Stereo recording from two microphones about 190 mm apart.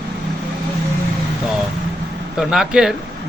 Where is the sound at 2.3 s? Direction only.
5° right (ahead or behind).